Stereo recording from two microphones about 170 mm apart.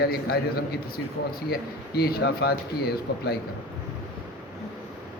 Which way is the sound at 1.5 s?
65° left (ahead or behind).